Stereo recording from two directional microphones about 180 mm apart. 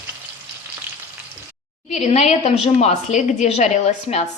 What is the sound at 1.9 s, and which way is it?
A woman's voice, 40° left (ahead or behind).